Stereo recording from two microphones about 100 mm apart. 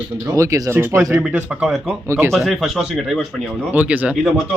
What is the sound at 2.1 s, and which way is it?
Speech, 25° right (ahead or behind).